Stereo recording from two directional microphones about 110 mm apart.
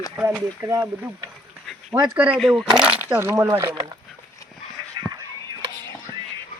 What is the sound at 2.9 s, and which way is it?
Speech, 15° right (ahead or behind).